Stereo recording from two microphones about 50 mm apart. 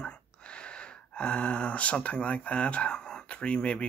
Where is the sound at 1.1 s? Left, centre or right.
Left.